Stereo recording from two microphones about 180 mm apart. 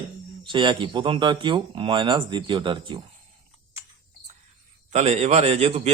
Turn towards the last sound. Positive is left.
turn(degrees=-40)  # may be behind; listen again after turning